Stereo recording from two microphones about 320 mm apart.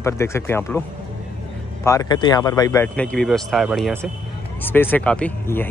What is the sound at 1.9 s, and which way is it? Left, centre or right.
Speech, centre.